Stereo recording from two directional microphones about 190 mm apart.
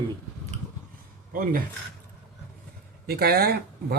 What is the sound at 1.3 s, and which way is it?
Speech, 45° right (ahead or behind).